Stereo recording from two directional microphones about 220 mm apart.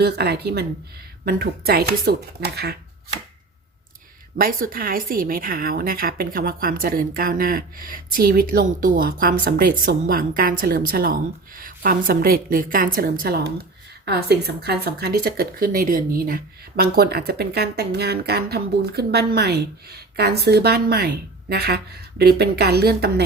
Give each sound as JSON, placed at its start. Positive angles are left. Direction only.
{"t": 0.0, "sound": "speech", "side_deg": -45}
{"t": 4.4, "sound": "speech", "side_deg": -40}